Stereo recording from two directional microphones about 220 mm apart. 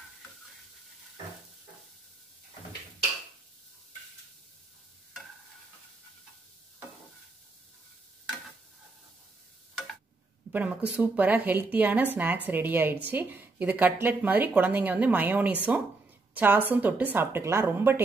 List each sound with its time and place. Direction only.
10.5 s a woman's voice: 5° right (ahead or behind)